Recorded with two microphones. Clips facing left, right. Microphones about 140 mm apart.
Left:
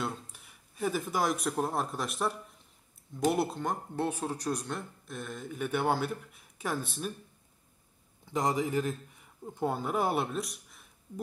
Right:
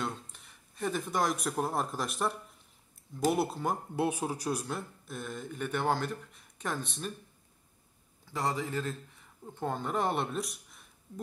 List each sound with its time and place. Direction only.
0.0 s speech: 5° left (ahead or behind)
8.3 s a man's voice: 15° left (ahead or behind); by 10.9 s centre (ahead or behind)